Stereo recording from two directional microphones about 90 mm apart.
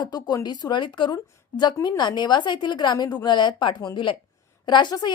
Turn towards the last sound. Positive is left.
turn(degrees=55)  # may be behind; listen again after turning